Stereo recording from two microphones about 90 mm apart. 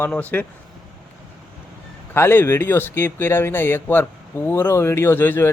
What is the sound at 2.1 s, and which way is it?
A man's voice, 25° left (ahead or behind).